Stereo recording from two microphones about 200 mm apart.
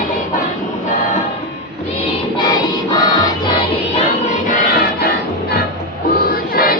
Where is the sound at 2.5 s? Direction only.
20° left (ahead or behind).